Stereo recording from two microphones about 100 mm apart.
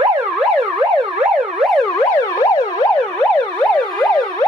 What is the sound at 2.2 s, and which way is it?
Emergency vehicle, 35° left (ahead or behind).